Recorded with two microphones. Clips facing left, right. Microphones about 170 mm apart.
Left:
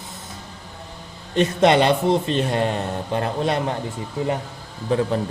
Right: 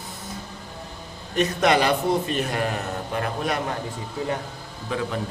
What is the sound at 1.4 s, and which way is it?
A man's voice, 25° left (ahead or behind).